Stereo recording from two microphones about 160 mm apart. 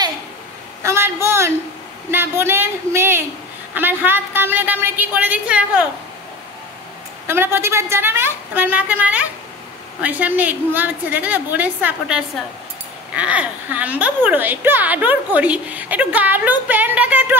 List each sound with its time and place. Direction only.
0.8 s speech: 15° right (ahead or behind)
7.2 s speech: 15° right (ahead or behind)